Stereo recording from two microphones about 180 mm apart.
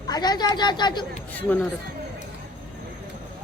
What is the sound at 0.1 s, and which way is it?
Speech, 20° left (ahead or behind).